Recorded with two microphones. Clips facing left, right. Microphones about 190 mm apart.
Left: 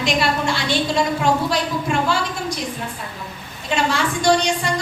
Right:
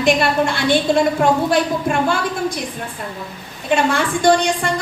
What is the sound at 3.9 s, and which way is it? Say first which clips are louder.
Speech: even; 55° right (ahead or behind).